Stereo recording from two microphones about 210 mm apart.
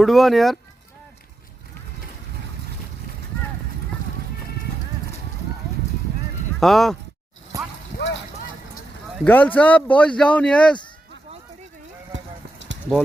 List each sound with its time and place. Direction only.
0.0 s speech: centre (ahead or behind)
6.6 s speech: centre (ahead or behind)
7.5 s vehicle: 15° right (ahead or behind)
7.9 s vehicle: 55° left (ahead or behind)
9.2 s speech: 10° left (ahead or behind)
12.1 s clip-clop: 60° right (ahead or behind)